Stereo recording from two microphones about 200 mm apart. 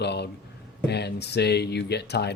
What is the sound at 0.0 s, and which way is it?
Speech, 55° left (ahead or behind).